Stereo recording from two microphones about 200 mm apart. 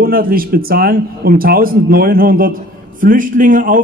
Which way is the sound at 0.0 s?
45° right (ahead or behind).